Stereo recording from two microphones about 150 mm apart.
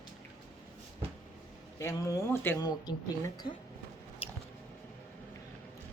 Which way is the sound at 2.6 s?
25° left (ahead or behind).